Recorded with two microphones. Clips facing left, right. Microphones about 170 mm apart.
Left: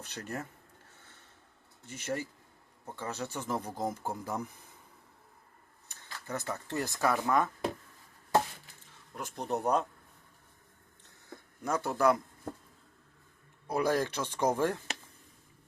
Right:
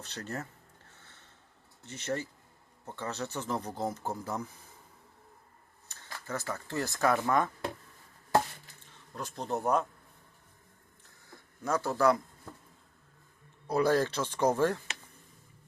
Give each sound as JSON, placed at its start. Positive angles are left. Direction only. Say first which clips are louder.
{"t": 0.0, "sound": "speech", "louder": "even", "side_deg": 10}
{"t": 1.9, "sound": "speech", "louder": "right 1 dB", "side_deg": 10}
{"t": 5.9, "sound": "speech", "louder": "right 1 dB", "side_deg": 20}
{"t": 9.1, "sound": "speech", "louder": "even", "side_deg": 15}
{"t": 11.6, "sound": "speech", "louder": "right 1 dB", "side_deg": 15}
{"t": 13.7, "sound": "speech", "louder": "right 3 dB", "side_deg": 10}